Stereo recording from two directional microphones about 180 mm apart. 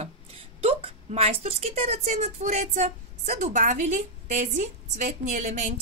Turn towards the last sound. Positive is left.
turn(degrees=-40)  # may be behind; listen again after turning